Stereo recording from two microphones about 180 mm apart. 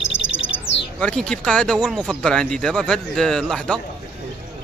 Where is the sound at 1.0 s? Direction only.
5° left (ahead or behind).